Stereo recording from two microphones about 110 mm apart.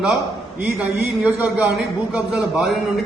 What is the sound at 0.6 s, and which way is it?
A man's voice, 10° right (ahead or behind).